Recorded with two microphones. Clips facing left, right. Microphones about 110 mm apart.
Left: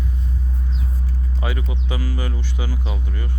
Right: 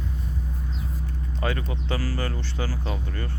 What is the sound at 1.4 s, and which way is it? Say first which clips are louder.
Speech: right 1 dB; 10° left (ahead or behind).